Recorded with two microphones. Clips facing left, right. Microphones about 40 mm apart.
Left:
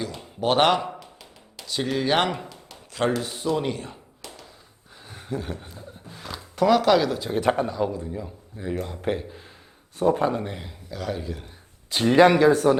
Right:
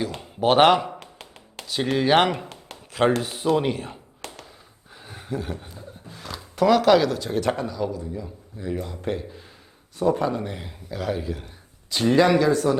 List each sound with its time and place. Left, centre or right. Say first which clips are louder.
0.2 s a man's voice: right 4 dB; centre
0.9 s a sound: right 1 dB; right
1.6 s a man's voice: right 3 dB; centre
3.0 s a man's voice: right 3 dB; right
4.2 s tap: right 4 dB; right
5.0 s a sound: right 1 dB; centre
7.2 s speech: left 1 dB; centre
7.7 s a man's voice: left 2 dB; left
10.4 s a man's voice: right 1 dB; centre
11.9 s speech: even; centre
12.1 s speech: left 3 dB; left